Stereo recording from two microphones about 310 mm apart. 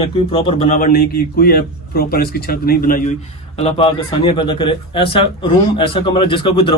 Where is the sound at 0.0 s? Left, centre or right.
Centre.